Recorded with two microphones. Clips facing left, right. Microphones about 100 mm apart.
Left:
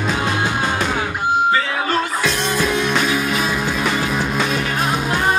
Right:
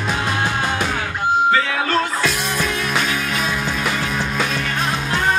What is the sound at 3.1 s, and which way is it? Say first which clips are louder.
Music: left 3 dB; 10° left (ahead or behind).